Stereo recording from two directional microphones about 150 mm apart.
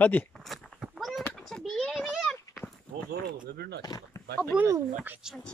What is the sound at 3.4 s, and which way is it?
Speech, 90° right.